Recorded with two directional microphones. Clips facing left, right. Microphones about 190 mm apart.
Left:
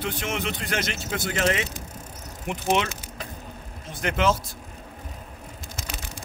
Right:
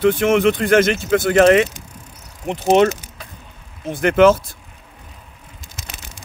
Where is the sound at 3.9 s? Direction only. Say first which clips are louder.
Right 11 dB; 55° right (ahead or behind).